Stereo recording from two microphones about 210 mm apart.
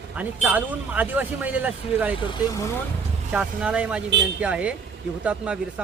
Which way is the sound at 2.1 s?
20° left (ahead or behind).